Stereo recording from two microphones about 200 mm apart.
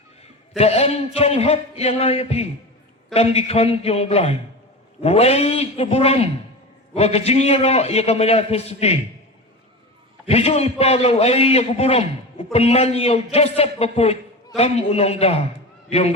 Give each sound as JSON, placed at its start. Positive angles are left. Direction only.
{"t": 0.5, "sound": "a man's voice", "side_deg": 30}
{"t": 10.2, "sound": "a man's voice", "side_deg": 30}